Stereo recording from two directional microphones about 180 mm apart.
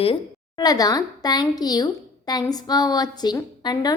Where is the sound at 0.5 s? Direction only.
20° left (ahead or behind).